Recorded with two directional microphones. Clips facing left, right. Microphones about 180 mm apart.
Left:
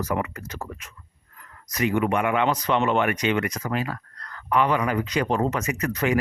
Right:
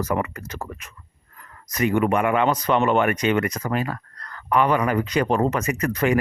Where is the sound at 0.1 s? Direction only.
50° right (ahead or behind).